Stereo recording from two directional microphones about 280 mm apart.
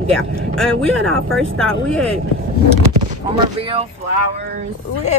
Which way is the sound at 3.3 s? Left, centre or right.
Centre.